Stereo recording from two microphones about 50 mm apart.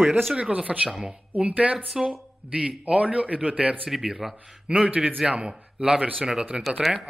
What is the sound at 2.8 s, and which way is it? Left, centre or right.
Speech, right.